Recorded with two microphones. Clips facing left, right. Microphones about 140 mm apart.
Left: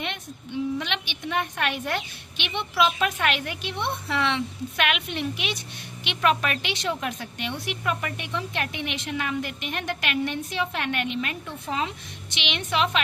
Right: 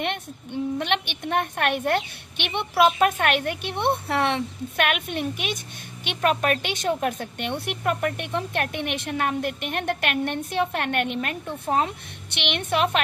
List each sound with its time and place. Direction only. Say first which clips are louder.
0.0 s a woman's voice: right 5 dB; 55° right (ahead or behind)